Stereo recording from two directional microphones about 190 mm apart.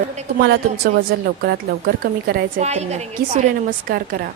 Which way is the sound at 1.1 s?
60° right (ahead or behind).